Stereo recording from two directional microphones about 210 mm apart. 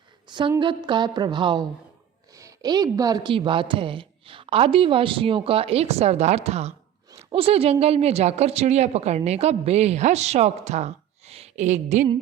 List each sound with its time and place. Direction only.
0.3 s a woman's voice: 20° right (ahead or behind)